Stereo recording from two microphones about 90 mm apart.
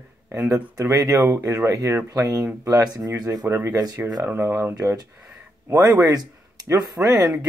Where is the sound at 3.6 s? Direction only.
45° right (ahead or behind).